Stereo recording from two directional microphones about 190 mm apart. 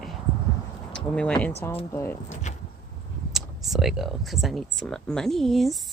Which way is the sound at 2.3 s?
40° left (ahead or behind).